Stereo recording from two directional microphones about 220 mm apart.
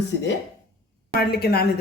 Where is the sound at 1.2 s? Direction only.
45° left (ahead or behind).